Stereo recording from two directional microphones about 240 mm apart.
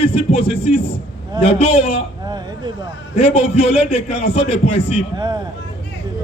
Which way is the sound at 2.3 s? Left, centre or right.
Centre.